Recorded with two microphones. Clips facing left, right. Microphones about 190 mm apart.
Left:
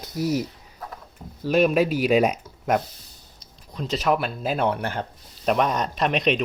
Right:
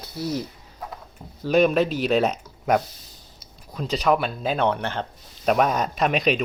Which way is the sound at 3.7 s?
Centre (ahead or behind).